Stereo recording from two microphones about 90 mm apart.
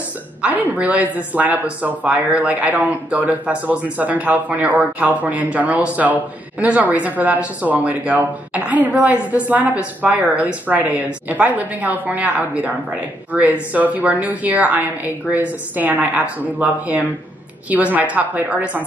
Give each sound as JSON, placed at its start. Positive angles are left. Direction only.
{"t": 0.4, "sound": "speech", "side_deg": -15}